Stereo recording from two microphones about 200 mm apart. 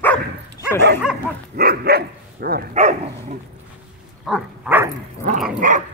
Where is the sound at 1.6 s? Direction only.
50° right (ahead or behind).